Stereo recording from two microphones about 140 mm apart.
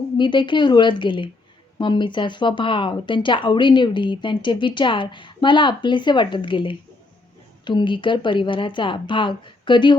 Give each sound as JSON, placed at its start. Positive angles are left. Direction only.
{"t": 0.2, "sound": "speech", "side_deg": 35}